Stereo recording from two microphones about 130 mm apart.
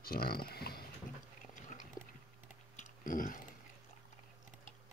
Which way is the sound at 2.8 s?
90° left.